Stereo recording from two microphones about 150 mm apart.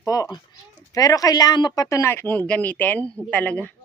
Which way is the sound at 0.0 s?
20° left (ahead or behind).